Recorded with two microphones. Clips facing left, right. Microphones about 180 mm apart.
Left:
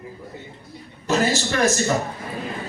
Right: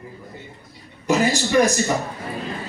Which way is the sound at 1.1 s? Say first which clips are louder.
Right 2 dB; 15° right (ahead or behind).